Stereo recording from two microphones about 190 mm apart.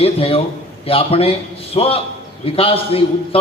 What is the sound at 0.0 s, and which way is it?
A man's voice, 30° left (ahead or behind).